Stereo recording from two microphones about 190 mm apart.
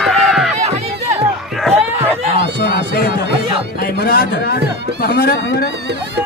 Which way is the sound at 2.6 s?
55° left (ahead or behind).